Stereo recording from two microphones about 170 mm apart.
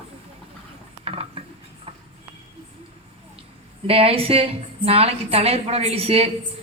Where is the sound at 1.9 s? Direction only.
35° right (ahead or behind).